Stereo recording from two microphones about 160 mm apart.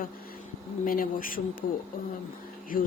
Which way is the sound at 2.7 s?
60° left (ahead or behind).